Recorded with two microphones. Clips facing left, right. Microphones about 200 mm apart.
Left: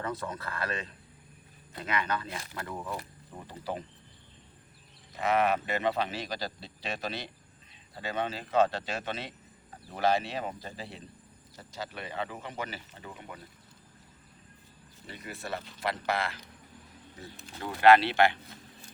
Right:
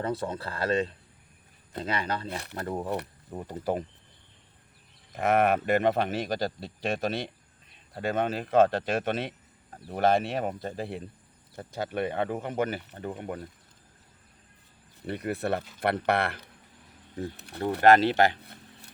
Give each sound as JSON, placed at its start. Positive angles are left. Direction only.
{"t": 0.0, "sound": "speech", "side_deg": -30}
{"t": 5.1, "sound": "speech", "side_deg": -50}
{"t": 15.0, "sound": "speech", "side_deg": -60}
{"t": 17.7, "sound": "speech", "side_deg": -45}
{"t": 18.4, "sound": "a sound", "side_deg": -60}